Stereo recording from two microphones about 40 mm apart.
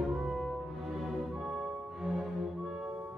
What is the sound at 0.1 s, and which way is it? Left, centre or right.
Cello, centre.